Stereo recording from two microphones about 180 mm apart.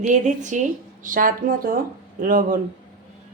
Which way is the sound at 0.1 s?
40° right (ahead or behind).